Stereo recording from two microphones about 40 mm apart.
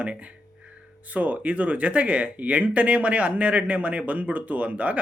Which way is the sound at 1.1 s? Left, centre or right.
Right.